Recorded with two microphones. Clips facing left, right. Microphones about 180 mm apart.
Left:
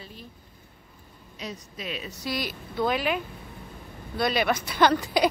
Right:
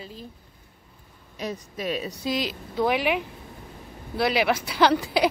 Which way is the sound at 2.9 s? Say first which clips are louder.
Right 3 dB; 80° right.